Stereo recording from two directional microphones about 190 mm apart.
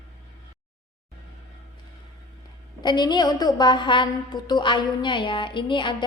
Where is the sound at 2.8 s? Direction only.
20° left (ahead or behind).